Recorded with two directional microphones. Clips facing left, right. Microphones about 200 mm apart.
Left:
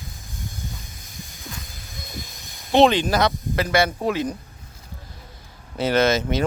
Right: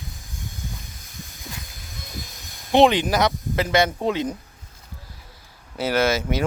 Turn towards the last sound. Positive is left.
turn(degrees=-10)  # may be behind; listen again after turning